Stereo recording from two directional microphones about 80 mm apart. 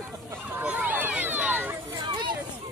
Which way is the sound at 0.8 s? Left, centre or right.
Right.